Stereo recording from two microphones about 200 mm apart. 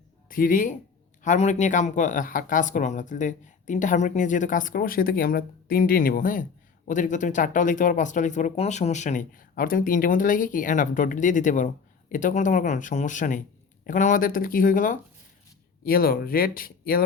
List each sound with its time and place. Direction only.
0.3 s speech: 45° left (ahead or behind)